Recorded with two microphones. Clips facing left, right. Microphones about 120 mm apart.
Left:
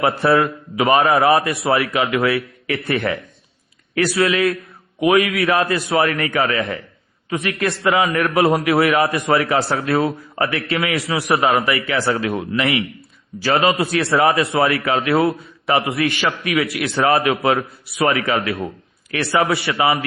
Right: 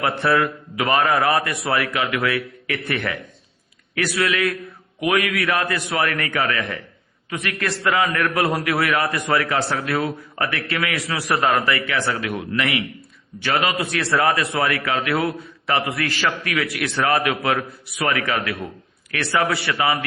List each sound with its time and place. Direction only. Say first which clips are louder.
0.0 s a man's voice: left 4 dB; 25° left (ahead or behind)